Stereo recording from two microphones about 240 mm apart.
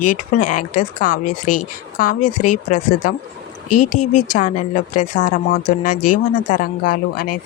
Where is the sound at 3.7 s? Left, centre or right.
Left.